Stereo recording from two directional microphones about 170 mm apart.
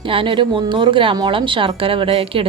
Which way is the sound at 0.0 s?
30° right (ahead or behind).